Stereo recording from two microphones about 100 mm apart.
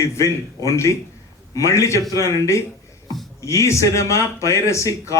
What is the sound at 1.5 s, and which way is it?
A man's voice, 30° left (ahead or behind).